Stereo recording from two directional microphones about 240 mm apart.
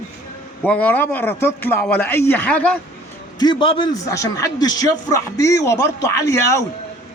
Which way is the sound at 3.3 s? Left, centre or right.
Centre.